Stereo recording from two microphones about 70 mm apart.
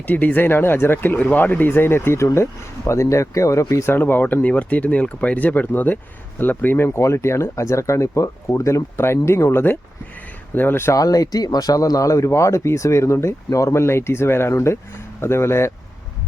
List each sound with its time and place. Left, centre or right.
0.1 s speech: left
3.9 s speech: left
10.9 s speech: left